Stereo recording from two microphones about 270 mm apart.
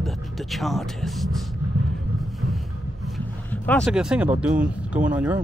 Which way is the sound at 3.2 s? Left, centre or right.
Centre.